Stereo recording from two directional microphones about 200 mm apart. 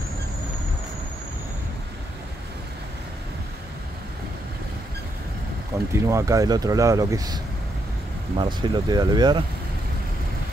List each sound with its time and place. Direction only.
5.9 s speech: 15° right (ahead or behind)
8.4 s speech: 20° right (ahead or behind)